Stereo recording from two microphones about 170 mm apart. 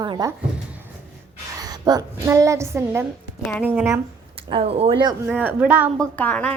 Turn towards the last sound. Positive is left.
turn(degrees=10)  # may be behind; listen again after turning